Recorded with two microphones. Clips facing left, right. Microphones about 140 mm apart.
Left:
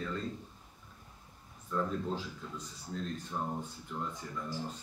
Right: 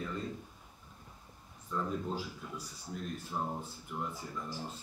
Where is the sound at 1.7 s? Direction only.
10° right (ahead or behind).